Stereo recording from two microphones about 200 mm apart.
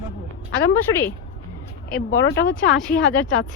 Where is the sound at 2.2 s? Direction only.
60° left (ahead or behind).